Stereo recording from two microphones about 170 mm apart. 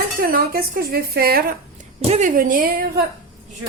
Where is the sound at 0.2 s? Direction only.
60° right (ahead or behind).